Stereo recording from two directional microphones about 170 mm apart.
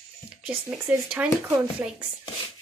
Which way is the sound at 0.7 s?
15° right (ahead or behind).